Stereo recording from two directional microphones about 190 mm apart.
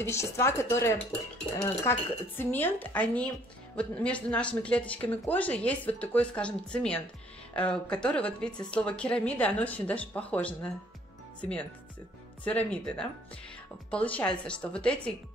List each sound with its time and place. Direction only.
0.1 s speech: 15° left (ahead or behind)
12.4 s a woman's voice: 5° left (ahead or behind)